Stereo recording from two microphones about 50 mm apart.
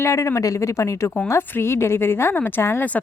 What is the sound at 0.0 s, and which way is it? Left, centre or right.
Speech, left.